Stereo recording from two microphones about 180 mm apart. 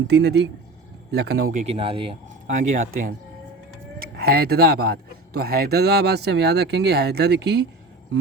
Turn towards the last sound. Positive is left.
turn(degrees=-70)  # may be behind; listen again after turning